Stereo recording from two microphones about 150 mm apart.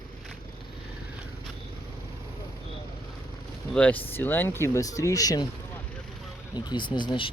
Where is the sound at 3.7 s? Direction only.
10° left (ahead or behind); by 5.5 s 25° left (ahead or behind).